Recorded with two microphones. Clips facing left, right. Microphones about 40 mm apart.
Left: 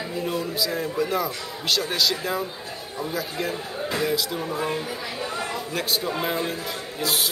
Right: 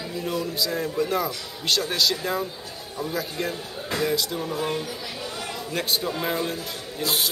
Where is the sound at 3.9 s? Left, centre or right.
Centre.